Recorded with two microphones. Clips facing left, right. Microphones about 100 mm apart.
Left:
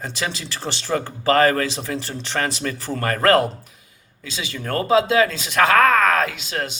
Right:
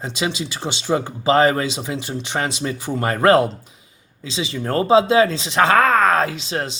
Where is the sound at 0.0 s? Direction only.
20° right (ahead or behind).